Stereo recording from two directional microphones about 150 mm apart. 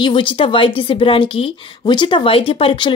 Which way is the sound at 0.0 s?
35° left (ahead or behind).